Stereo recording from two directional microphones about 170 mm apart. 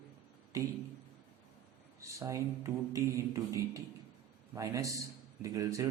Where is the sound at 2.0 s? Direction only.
20° right (ahead or behind).